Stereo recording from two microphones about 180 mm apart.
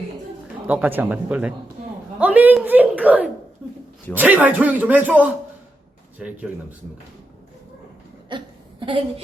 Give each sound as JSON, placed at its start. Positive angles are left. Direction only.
{"t": 0.7, "sound": "a man's voice", "side_deg": -10}
{"t": 8.8, "sound": "a woman's voice", "side_deg": -30}